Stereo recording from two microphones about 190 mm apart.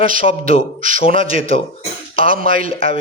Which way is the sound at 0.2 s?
30° left (ahead or behind).